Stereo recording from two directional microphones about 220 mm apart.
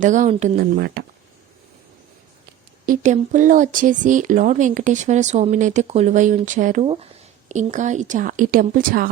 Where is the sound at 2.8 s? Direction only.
35° right (ahead or behind).